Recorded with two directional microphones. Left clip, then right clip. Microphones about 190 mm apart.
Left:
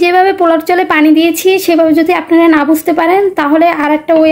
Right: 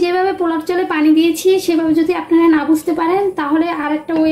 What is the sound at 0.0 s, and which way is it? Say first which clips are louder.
A woman's voice: left 8 dB; 45° left (ahead or behind).